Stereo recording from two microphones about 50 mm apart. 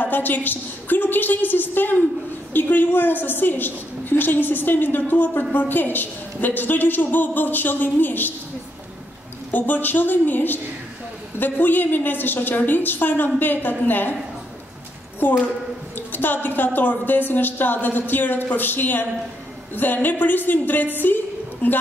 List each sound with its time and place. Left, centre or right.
0.0 s a woman's voice: left
9.5 s a woman's voice: left
15.1 s a woman's voice: left